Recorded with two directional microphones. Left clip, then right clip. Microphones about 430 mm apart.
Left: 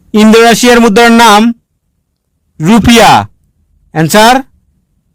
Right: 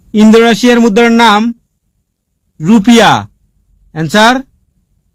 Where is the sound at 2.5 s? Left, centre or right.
Centre.